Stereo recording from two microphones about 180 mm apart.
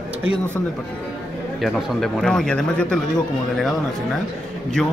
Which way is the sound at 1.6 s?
Centre (ahead or behind).